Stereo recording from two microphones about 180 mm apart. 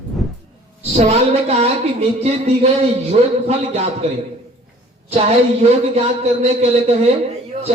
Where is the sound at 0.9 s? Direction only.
35° right (ahead or behind).